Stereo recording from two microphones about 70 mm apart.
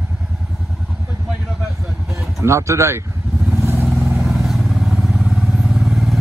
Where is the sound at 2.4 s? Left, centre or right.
Right.